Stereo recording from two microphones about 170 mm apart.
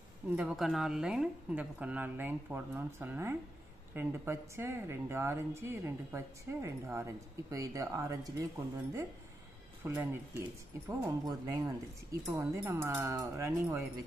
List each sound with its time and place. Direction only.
0.4 s speech: centre (ahead or behind); by 8.5 s 20° right (ahead or behind)
9.8 s speech: 15° right (ahead or behind)